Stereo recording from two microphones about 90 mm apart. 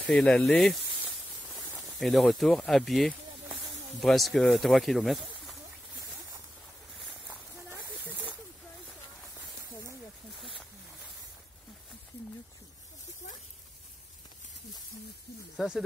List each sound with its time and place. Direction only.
0.1 s speech: 10° left (ahead or behind)
2.0 s speech: centre (ahead or behind)
7.2 s a sound: 20° right (ahead or behind)
10.4 s wild animals: centre (ahead or behind)
15.5 s snake: 5° right (ahead or behind)